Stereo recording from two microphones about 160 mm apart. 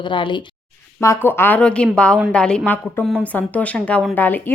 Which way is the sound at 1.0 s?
15° left (ahead or behind).